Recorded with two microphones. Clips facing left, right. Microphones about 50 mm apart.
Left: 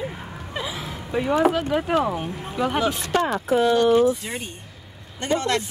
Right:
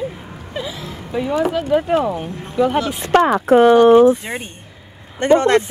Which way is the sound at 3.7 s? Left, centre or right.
Right.